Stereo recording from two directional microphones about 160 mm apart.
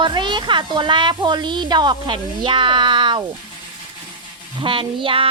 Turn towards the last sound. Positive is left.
turn(degrees=-35)  # may be behind; listen again after turning